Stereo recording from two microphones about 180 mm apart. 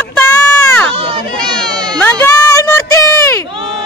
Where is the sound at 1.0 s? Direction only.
30° right (ahead or behind).